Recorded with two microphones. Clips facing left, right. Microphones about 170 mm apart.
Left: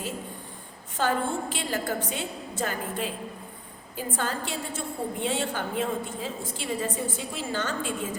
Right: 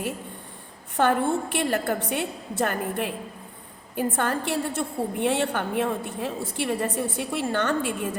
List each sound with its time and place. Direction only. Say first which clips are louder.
0.9 s a woman's voice: right 5 dB; 60° right (ahead or behind)